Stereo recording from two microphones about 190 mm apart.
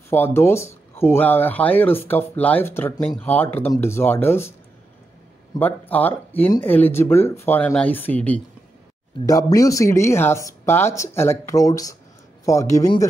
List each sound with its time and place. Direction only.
0.1 s speech: 10° left (ahead or behind)
5.6 s speech: 10° left (ahead or behind)
9.2 s speech: 20° left (ahead or behind)